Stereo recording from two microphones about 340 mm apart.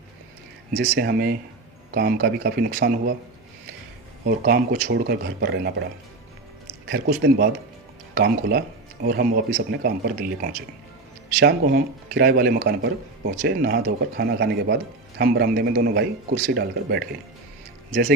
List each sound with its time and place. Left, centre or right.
0.8 s speech: right
4.3 s speech: right